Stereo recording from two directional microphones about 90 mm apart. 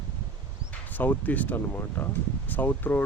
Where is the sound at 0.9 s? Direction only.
20° left (ahead or behind).